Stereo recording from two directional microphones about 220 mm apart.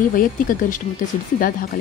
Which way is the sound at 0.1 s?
40° left (ahead or behind).